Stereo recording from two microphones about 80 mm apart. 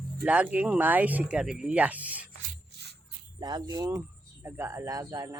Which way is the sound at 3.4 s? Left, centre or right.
Right.